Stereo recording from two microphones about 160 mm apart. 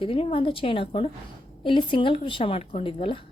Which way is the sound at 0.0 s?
35° left (ahead or behind).